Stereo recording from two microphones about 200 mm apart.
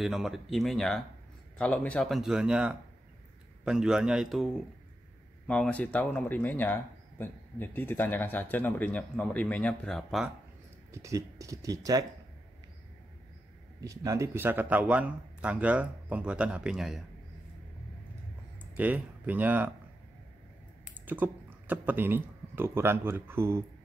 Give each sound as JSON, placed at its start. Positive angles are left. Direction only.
{"t": 0.0, "sound": "speech", "side_deg": 0}
{"t": 10.9, "sound": "speech", "side_deg": -15}
{"t": 13.8, "sound": "speech", "side_deg": -15}
{"t": 18.6, "sound": "speech", "side_deg": -5}
{"t": 20.8, "sound": "speech", "side_deg": -10}